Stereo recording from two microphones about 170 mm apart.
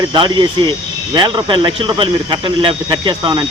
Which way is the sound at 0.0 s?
25° right (ahead or behind).